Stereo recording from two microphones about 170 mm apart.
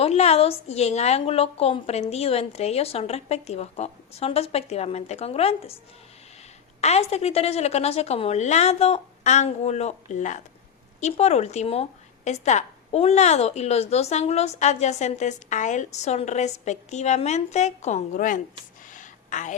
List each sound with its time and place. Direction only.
0.0 s a woman's voice: 40° left (ahead or behind)
6.8 s a woman's voice: 40° left (ahead or behind)
18.9 s a sound: 50° left (ahead or behind)